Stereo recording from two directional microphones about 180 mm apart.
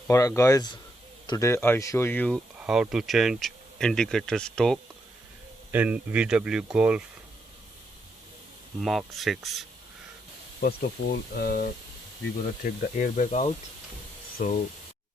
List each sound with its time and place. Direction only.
0.1 s speech: 15° left (ahead or behind)
2.6 s speech: 5° right (ahead or behind)
5.7 s speech: 10° right (ahead or behind)
8.8 s speech: centre (ahead or behind)
10.6 s speech: 60° left (ahead or behind)